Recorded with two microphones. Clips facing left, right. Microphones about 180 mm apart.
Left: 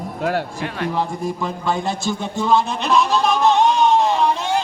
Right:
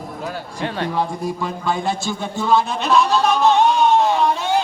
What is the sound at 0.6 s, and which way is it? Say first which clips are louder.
Speech: right 2 dB; 30° right (ahead or behind).